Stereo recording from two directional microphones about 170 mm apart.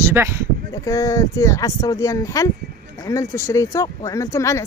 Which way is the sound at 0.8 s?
20° left (ahead or behind).